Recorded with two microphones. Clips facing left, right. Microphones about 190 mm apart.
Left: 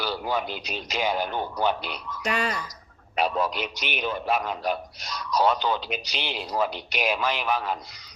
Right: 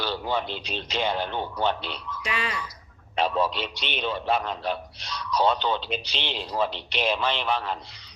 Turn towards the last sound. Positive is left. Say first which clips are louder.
# left 1 dB
turn(degrees=10)  # may be behind; listen again after turning